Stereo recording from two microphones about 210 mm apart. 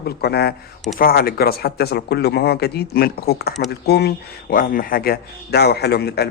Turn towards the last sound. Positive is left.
turn(degrees=50)  # may be behind; listen again after turning